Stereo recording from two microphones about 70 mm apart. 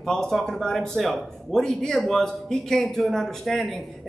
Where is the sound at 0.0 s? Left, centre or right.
Centre.